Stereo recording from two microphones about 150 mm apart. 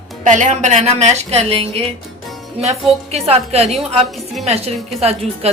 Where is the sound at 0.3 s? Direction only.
55° right (ahead or behind).